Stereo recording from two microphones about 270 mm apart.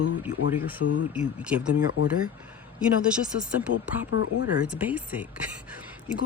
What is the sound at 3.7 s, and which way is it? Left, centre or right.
Speech, left.